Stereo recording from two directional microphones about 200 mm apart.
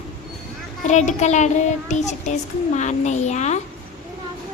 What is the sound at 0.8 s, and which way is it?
Child singing, 35° left (ahead or behind).